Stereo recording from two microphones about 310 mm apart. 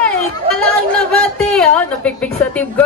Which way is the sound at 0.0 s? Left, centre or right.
Centre.